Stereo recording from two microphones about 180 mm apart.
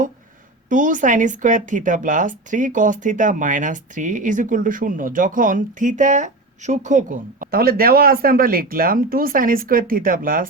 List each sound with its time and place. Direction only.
0.7 s speech: 45° right (ahead or behind)